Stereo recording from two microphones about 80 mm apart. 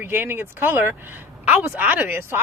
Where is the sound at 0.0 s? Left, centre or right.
Right.